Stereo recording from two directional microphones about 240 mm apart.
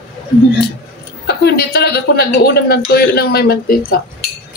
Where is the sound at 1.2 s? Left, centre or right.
Left.